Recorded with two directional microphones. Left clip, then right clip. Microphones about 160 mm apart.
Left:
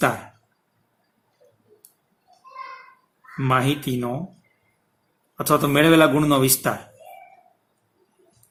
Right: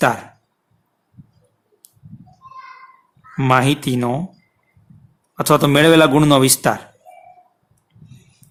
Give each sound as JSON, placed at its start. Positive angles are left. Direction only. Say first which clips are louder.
{"t": 3.3, "sound": "a man's voice", "louder": "right 6 dB", "side_deg": -60}
{"t": 5.4, "sound": "a man's voice", "louder": "right 5 dB", "side_deg": -60}